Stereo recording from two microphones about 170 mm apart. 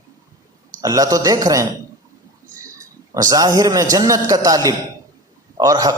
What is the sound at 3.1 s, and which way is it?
A man's voice, 20° right (ahead or behind).